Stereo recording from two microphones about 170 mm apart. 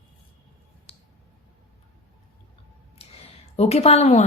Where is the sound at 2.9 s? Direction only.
35° left (ahead or behind).